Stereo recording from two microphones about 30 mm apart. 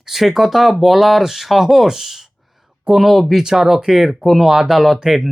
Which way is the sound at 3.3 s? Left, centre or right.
Centre.